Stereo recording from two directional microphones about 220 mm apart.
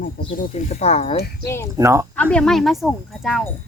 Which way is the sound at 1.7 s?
15° right (ahead or behind).